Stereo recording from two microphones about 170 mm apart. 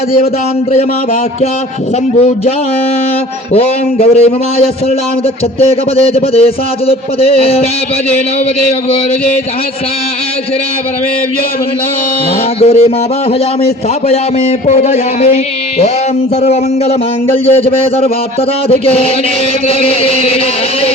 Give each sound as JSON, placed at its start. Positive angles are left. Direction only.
{"t": 2.1, "sound": "a man's voice", "side_deg": 35}
{"t": 4.0, "sound": "a man's voice", "side_deg": 40}
{"t": 12.5, "sound": "a man's voice", "side_deg": 35}
{"t": 14.7, "sound": "a man's voice", "side_deg": 40}
{"t": 17.4, "sound": "a man's voice", "side_deg": 35}